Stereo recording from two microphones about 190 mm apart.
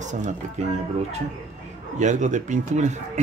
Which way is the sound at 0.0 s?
40° right (ahead or behind).